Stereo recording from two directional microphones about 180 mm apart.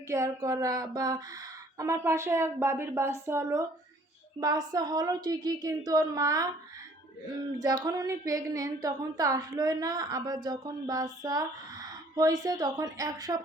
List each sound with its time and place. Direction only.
0.1 s a woman's voice: 20° right (ahead or behind)
7.6 s a woman's voice: 20° right (ahead or behind)